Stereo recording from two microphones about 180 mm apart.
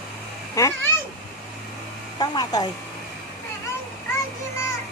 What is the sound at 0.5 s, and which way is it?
Speech, 15° left (ahead or behind).